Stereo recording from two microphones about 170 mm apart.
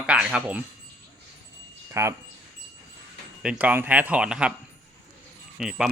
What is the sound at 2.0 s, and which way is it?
Speech, 15° right (ahead or behind).